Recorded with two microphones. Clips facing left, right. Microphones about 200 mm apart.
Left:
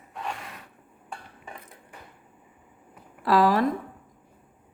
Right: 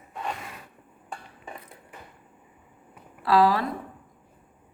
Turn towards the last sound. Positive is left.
turn(degrees=50)  # may be behind; listen again after turning